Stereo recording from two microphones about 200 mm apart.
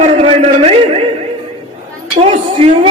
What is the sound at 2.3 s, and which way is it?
Speech, 30° right (ahead or behind).